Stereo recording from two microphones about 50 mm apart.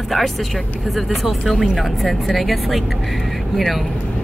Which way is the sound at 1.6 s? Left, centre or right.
Centre.